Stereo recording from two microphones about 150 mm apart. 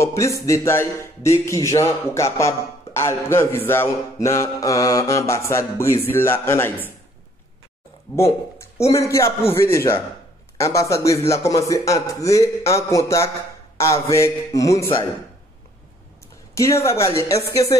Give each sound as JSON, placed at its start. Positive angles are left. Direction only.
{"t": 0.0, "sound": "music", "side_deg": 20}
{"t": 0.5, "sound": "a man's voice", "side_deg": 20}
{"t": 8.5, "sound": "a man's voice", "side_deg": 20}
{"t": 16.5, "sound": "a man's voice", "side_deg": 20}